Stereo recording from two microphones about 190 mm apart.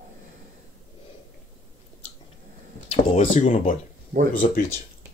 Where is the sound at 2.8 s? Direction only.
40° left (ahead or behind).